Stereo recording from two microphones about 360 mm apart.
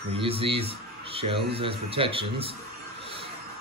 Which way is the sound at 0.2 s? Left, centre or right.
Centre.